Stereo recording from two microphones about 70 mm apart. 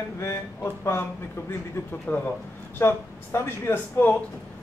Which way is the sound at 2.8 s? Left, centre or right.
Left.